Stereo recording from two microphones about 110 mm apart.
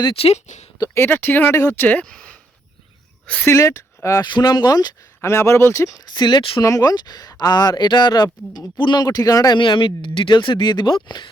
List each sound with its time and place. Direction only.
0.0 s speech: 55° left (ahead or behind); by 0.7 s 90° left
0.8 s speech: 20° left (ahead or behind)
3.5 s speech: 25° left (ahead or behind)
4.2 s speech: 40° left (ahead or behind)
5.2 s speech: 25° left (ahead or behind)
6.1 s speech: 40° left (ahead or behind)
6.6 s speech: 35° left (ahead or behind)
9.6 s speech: 50° left (ahead or behind)